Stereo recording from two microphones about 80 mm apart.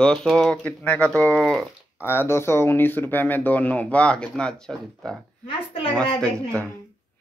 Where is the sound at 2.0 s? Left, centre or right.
Left; by 6.7 s centre.